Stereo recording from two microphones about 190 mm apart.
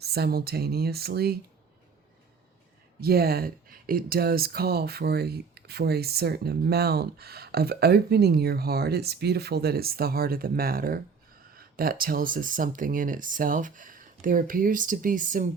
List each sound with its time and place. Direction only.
0.0 s speech: 55° right (ahead or behind)
3.0 s speech: 55° right (ahead or behind)